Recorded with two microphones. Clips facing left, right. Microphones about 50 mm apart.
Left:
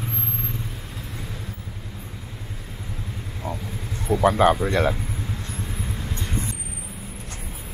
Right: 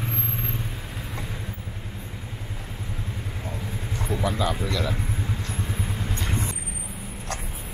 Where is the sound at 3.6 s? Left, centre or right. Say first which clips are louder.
Left 4 dB; centre.